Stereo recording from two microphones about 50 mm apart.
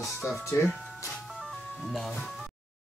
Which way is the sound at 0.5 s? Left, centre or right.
Left.